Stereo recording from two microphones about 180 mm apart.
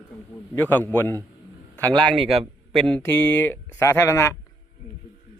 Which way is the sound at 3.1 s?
10° left (ahead or behind).